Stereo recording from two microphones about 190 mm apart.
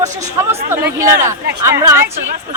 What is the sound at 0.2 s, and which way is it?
Speech, 15° right (ahead or behind).